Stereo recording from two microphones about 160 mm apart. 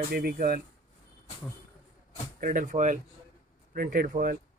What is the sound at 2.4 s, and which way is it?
Speech, 55° right (ahead or behind).